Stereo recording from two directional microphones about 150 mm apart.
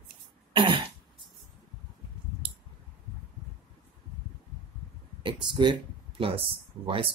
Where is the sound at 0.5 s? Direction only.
35° right (ahead or behind).